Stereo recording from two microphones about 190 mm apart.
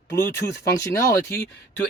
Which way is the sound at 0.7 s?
15° left (ahead or behind).